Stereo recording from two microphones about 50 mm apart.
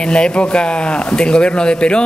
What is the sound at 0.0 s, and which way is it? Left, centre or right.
Speech, centre.